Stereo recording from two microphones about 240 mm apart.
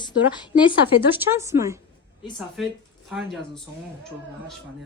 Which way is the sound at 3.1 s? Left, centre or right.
Centre.